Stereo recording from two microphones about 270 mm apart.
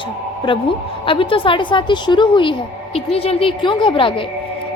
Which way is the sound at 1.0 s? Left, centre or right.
Centre.